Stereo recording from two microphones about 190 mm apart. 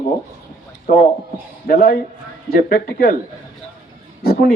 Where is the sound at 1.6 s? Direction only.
50° left (ahead or behind).